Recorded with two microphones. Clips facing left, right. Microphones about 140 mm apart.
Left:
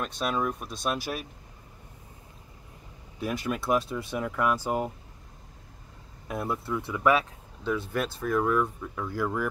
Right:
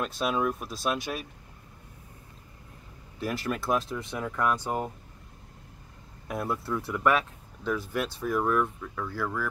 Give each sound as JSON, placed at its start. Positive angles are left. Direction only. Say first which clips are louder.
{"t": 0.0, "sound": "speech", "louder": "right 1 dB", "side_deg": 0}
{"t": 3.2, "sound": "speech", "louder": "left 1 dB", "side_deg": 0}
{"t": 6.2, "sound": "speech", "louder": "even", "side_deg": 0}
{"t": 8.5, "sound": "speech", "louder": "left 1 dB", "side_deg": 15}